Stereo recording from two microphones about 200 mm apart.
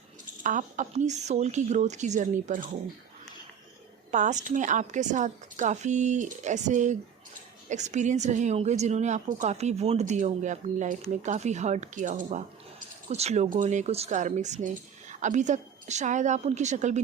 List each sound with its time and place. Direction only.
0.4 s speech: 40° right (ahead or behind)
4.1 s speech: 40° right (ahead or behind)